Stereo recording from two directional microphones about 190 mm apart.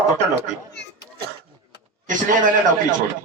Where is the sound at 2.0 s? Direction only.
45° right (ahead or behind).